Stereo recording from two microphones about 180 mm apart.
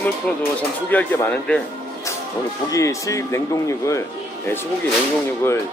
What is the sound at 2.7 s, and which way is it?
Speech, 20° left (ahead or behind).